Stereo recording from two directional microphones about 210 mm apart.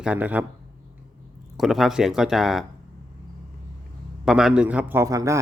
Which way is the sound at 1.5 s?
Centre (ahead or behind).